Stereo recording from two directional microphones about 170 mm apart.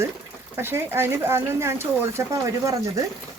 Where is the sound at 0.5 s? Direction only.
15° right (ahead or behind).